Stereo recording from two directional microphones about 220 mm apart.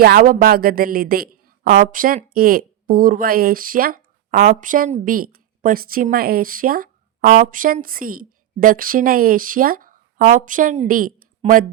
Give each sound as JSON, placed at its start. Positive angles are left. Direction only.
{"t": 0.0, "sound": "a woman's voice", "side_deg": -40}